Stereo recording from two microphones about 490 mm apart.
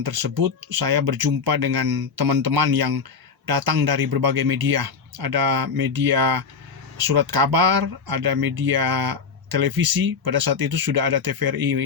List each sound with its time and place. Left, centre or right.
0.0 s speech: right